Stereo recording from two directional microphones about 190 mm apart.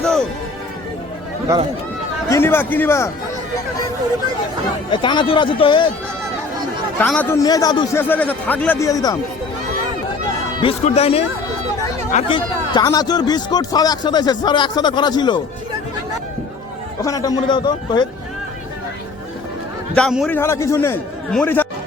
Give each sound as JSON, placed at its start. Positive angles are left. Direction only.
{"t": 0.0, "sound": "music", "side_deg": 5}
{"t": 2.3, "sound": "a man's voice", "side_deg": 10}
{"t": 4.9, "sound": "a man's voice", "side_deg": 25}
{"t": 7.0, "sound": "a man's voice", "side_deg": 10}
{"t": 7.9, "sound": "a man's voice", "side_deg": 10}
{"t": 10.6, "sound": "a man's voice", "side_deg": 30}
{"t": 17.0, "sound": "a man's voice", "side_deg": 20}
{"t": 20.0, "sound": "a man's voice", "side_deg": 5}